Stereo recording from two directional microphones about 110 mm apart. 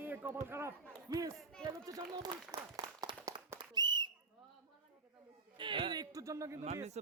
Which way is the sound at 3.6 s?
40° right (ahead or behind).